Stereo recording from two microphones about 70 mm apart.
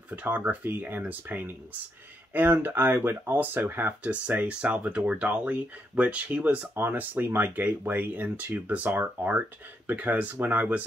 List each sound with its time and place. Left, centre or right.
0.1 s speech: right
6.7 s speech: right